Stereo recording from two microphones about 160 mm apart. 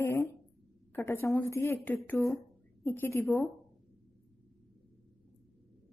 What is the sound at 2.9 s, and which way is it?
Speech, 15° left (ahead or behind).